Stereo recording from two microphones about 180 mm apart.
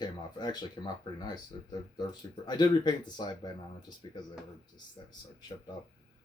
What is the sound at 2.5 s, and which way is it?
Speech, 25° left (ahead or behind).